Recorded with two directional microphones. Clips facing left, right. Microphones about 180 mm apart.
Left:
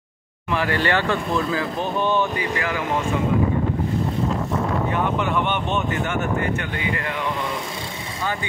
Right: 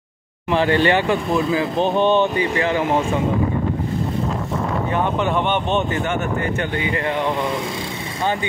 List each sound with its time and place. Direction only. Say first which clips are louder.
0.5 s speech: right 5 dB; 25° right (ahead or behind)
4.9 s speech: right 5 dB; 30° right (ahead or behind)